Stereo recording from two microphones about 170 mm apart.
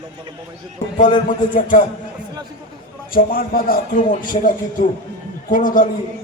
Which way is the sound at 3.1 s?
60° left (ahead or behind).